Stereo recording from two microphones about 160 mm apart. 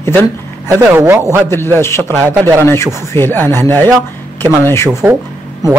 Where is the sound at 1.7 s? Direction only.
15° left (ahead or behind).